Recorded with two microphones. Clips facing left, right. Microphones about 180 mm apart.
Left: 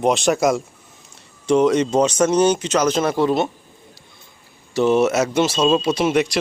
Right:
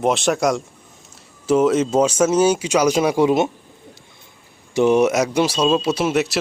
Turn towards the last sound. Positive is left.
turn(degrees=-5)  # may be behind; listen again after turning